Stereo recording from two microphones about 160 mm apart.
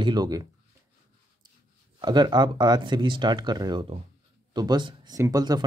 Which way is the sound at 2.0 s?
25° right (ahead or behind).